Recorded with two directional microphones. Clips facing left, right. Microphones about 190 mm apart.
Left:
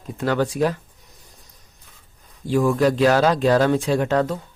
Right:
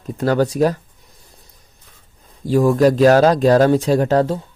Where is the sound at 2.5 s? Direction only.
40° right (ahead or behind).